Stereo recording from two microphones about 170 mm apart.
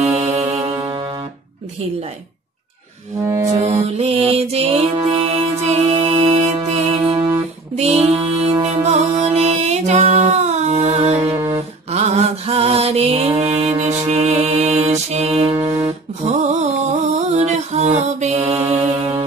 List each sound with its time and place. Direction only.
0.2 s music: 40° right (ahead or behind)
0.7 s music: 25° right (ahead or behind)
3.3 s music: 15° right (ahead or behind)
3.5 s music: 35° right (ahead or behind)
7.7 s music: 40° right (ahead or behind)
11.3 s a sound: 20° right (ahead or behind)
11.9 s mantra: 40° right (ahead or behind)
15.5 s music: 15° right (ahead or behind)
17.4 s mantra: 40° right (ahead or behind)
18.7 s music: 40° right (ahead or behind)